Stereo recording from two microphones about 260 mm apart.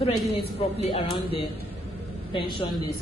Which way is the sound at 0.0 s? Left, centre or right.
Left.